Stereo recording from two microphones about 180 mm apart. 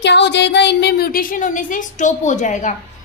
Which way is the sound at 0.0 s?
75° left (ahead or behind).